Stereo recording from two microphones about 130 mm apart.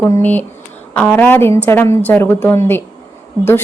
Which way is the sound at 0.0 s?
15° left (ahead or behind).